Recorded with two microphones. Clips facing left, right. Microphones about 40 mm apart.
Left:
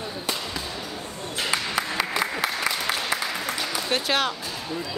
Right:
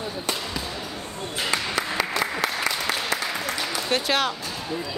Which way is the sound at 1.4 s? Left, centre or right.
Centre.